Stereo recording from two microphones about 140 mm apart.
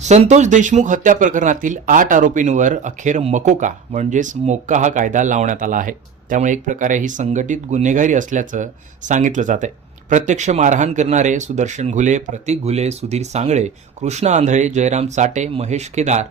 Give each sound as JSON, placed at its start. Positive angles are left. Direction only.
{"t": 0.0, "sound": "speech", "side_deg": -55}